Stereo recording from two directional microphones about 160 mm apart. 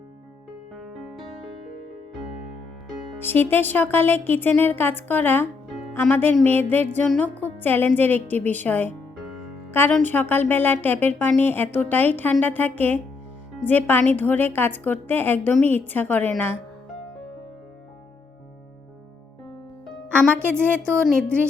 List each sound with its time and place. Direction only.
3.2 s a woman's voice: 15° left (ahead or behind)
20.3 s a woman's voice: 15° right (ahead or behind)